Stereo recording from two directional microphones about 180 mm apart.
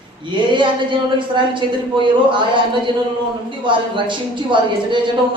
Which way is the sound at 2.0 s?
25° right (ahead or behind).